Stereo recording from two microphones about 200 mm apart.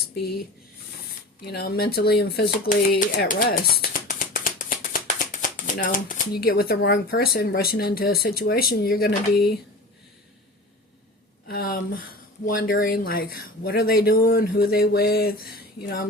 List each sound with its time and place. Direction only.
1.5 s speech: 50° left (ahead or behind)
11.4 s speech: 50° left (ahead or behind)